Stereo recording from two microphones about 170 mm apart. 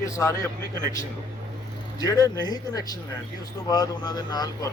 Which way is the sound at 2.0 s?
20° left (ahead or behind).